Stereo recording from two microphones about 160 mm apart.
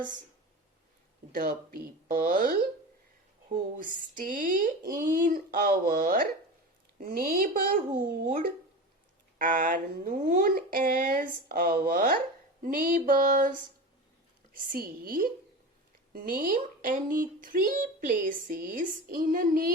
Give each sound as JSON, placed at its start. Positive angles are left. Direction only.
{"t": 1.3, "sound": "speech", "side_deg": -70}